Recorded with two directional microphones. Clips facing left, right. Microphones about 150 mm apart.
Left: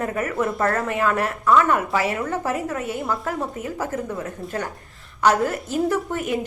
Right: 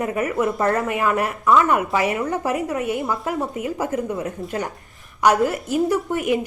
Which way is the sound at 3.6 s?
15° right (ahead or behind).